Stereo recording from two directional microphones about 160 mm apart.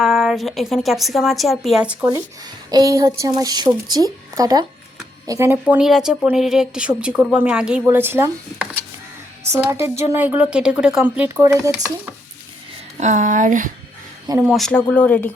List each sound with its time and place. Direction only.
0.0 s speech: centre (ahead or behind)
2.6 s a woman's voice: 25° right (ahead or behind)
9.6 s speech: 15° right (ahead or behind)
13.0 s speech: 50° right (ahead or behind)
14.3 s speech: 5° right (ahead or behind)